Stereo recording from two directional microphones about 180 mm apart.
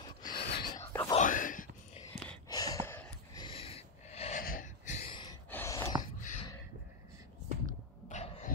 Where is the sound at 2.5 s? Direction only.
20° left (ahead or behind).